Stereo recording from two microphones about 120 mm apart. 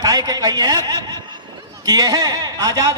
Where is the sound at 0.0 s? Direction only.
35° right (ahead or behind).